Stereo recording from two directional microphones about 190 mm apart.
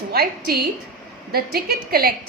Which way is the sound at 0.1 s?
55° right (ahead or behind).